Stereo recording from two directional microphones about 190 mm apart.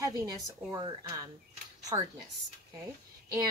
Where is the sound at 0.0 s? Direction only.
20° right (ahead or behind).